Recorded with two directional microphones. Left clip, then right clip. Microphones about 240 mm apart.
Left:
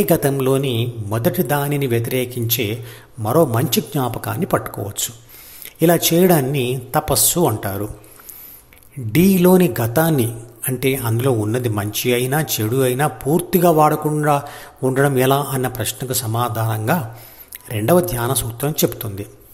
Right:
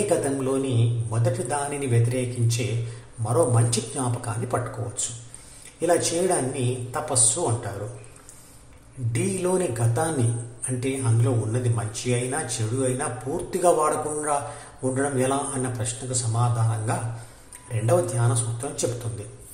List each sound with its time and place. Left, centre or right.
0.1 s a man's voice: left
5.8 s a man's voice: left
9.1 s a man's voice: left